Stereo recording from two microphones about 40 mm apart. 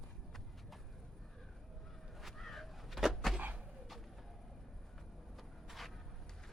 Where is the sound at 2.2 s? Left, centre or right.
Centre.